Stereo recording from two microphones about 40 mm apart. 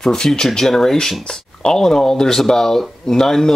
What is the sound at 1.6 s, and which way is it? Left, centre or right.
Speech, left.